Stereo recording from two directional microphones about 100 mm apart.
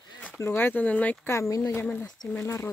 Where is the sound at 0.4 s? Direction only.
25° left (ahead or behind).